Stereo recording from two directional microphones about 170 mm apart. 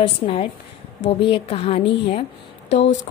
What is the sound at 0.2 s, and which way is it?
A woman's voice, 35° left (ahead or behind).